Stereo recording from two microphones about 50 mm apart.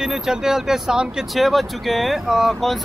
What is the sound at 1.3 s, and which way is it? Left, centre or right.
Speech, centre.